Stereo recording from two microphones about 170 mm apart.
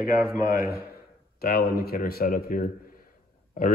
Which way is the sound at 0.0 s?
15° right (ahead or behind).